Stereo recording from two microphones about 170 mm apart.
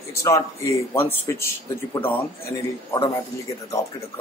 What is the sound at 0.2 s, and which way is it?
Speech, 20° left (ahead or behind).